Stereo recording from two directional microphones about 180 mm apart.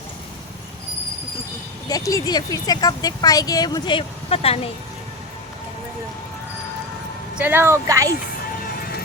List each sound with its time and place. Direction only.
1.9 s speech: 20° left (ahead or behind)
7.3 s speech: 10° right (ahead or behind)